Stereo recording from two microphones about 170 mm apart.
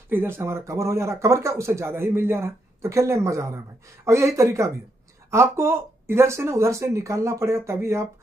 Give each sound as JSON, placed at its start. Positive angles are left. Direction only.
{"t": 0.1, "sound": "speech", "side_deg": -15}